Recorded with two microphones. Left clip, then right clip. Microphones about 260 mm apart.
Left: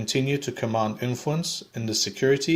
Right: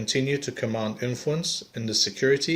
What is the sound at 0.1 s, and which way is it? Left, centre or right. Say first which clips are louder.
Speech: even; left.